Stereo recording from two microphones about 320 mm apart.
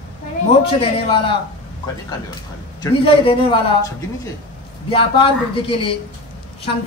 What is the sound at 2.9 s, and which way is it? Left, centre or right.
Speech, centre.